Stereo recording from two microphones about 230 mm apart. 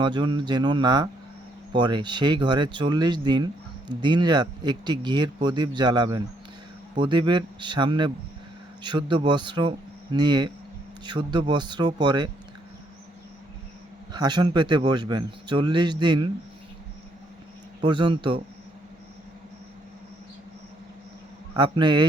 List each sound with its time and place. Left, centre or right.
0.0 s speech: centre
14.1 s speech: centre
17.7 s speech: centre
21.5 s speech: centre